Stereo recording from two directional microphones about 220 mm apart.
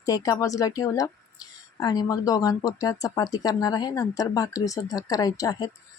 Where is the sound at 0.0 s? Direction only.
15° left (ahead or behind).